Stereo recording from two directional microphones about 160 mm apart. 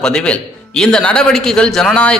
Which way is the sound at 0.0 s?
5° left (ahead or behind).